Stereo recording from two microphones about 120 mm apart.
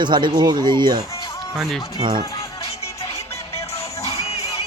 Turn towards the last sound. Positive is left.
turn(degrees=60)  # may be behind; listen again after turning